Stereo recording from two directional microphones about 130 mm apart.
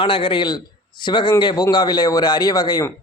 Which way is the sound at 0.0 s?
40° left (ahead or behind).